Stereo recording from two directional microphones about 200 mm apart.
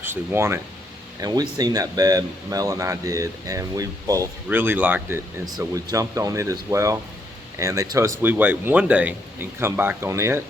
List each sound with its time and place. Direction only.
0.0 s speech: 10° right (ahead or behind)